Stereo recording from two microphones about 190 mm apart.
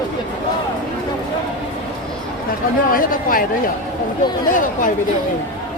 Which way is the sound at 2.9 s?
50° left (ahead or behind).